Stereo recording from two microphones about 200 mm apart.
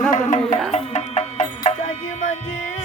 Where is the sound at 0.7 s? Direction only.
35° left (ahead or behind).